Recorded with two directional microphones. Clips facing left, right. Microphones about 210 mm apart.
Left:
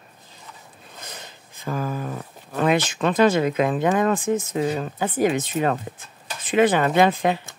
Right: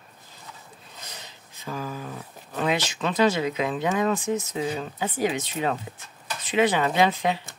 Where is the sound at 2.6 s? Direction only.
50° left (ahead or behind).